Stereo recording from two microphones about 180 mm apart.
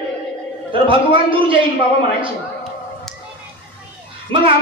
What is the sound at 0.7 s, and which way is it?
Speech, 30° right (ahead or behind).